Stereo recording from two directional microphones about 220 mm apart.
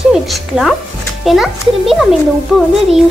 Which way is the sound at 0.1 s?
Centre (ahead or behind).